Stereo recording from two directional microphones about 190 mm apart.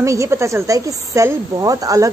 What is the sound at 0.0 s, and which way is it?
A woman's voice, 15° right (ahead or behind).